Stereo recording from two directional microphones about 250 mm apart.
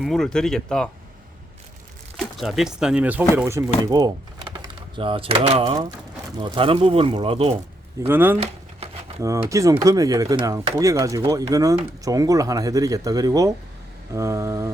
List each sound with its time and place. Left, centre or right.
0.0 s speech: centre
2.1 s speech: centre; by 7.5 s right
8.0 s speech: centre